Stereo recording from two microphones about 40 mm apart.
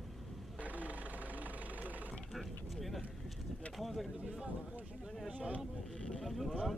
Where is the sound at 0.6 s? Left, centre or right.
Right.